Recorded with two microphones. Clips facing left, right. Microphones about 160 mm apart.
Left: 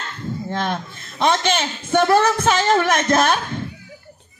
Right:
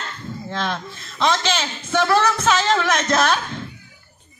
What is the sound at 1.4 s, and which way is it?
Music, 50° left (ahead or behind).